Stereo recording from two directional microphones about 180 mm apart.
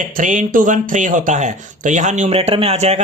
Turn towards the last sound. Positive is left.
turn(degrees=-35)  # may be behind; listen again after turning